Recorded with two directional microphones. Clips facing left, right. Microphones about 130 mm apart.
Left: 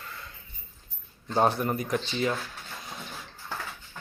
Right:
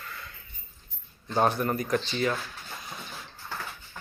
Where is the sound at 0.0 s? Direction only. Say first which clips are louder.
Even; 25° left (ahead or behind).